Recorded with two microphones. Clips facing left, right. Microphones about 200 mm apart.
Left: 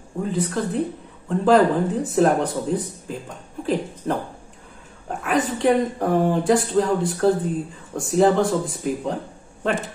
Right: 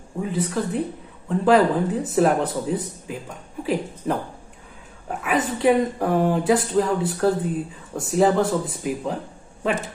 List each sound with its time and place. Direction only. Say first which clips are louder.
0.2 s speech: left 1 dB; 5° right (ahead or behind)